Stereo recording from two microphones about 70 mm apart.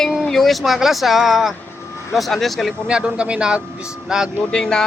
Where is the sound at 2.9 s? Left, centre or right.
Centre.